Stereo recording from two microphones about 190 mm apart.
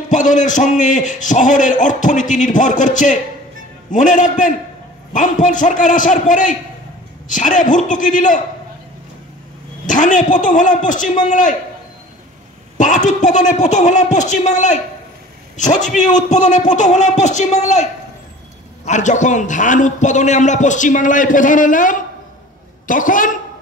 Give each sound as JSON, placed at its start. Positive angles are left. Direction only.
{"t": 0.1, "sound": "a man's voice", "side_deg": 40}
{"t": 9.8, "sound": "a man's voice", "side_deg": 40}
{"t": 12.7, "sound": "a man's voice", "side_deg": 40}
{"t": 18.9, "sound": "a man's voice", "side_deg": 40}